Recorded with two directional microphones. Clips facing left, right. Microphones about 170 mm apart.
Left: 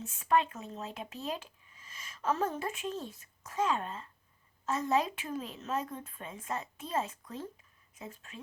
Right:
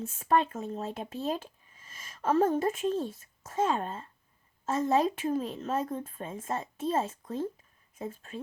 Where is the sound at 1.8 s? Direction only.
50° right (ahead or behind).